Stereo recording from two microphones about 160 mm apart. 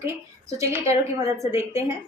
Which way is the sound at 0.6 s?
20° right (ahead or behind).